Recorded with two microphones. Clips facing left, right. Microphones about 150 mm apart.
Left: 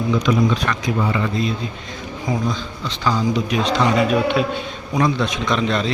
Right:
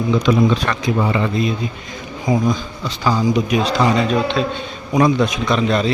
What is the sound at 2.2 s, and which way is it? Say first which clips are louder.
Speech: right 5 dB; 10° right (ahead or behind).